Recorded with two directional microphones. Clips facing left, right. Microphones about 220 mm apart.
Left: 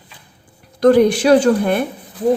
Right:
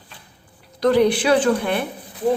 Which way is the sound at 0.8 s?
50° left (ahead or behind).